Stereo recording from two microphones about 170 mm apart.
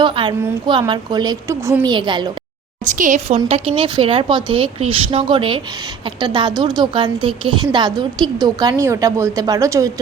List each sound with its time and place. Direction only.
0.0 s a woman's voice: 30° right (ahead or behind)
1.9 s a woman's voice: 25° right (ahead or behind)
3.0 s a woman's voice: 45° right (ahead or behind); by 9.9 s 20° right (ahead or behind)